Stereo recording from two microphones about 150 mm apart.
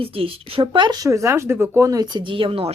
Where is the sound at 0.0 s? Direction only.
40° right (ahead or behind).